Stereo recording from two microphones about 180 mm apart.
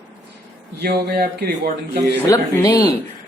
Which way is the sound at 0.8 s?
60° right (ahead or behind).